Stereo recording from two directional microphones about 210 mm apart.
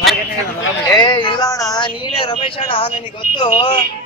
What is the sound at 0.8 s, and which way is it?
Speech, 20° left (ahead or behind).